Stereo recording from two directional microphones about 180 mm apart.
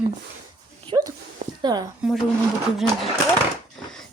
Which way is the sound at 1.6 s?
20° right (ahead or behind).